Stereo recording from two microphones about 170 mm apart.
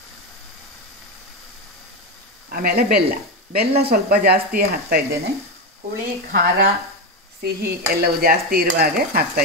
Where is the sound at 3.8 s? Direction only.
65° right (ahead or behind).